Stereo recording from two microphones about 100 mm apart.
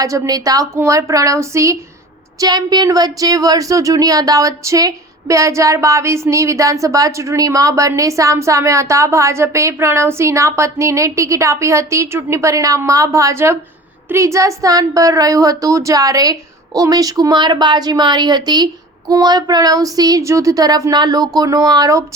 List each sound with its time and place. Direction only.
0.0 s speech: 35° right (ahead or behind)
2.4 s speech: 45° right (ahead or behind)